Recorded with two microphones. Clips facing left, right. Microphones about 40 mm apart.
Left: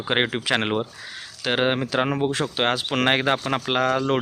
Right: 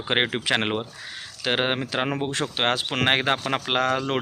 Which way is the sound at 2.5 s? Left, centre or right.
Right.